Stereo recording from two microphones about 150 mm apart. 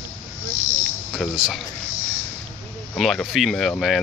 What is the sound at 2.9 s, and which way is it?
Speech, 5° left (ahead or behind).